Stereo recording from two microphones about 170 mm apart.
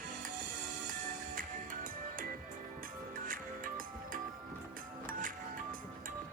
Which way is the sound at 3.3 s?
55° right (ahead or behind).